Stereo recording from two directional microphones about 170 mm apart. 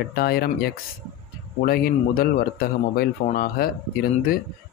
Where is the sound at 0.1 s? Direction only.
65° left (ahead or behind).